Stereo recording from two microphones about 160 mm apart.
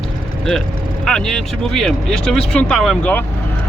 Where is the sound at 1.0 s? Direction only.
5° left (ahead or behind).